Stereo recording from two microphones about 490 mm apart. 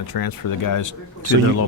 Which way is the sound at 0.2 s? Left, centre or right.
Left.